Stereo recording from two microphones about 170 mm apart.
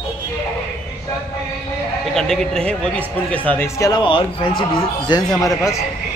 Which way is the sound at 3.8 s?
25° left (ahead or behind).